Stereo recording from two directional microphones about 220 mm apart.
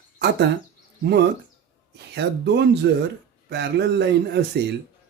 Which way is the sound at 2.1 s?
50° right (ahead or behind).